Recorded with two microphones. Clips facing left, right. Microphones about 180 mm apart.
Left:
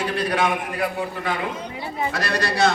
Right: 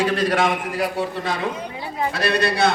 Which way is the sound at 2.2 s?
60° right (ahead or behind).